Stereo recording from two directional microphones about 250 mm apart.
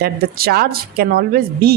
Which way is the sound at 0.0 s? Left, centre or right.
Right.